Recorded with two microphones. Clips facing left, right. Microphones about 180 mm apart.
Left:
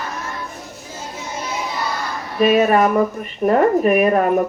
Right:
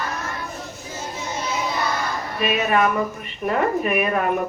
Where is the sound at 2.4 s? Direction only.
45° left (ahead or behind).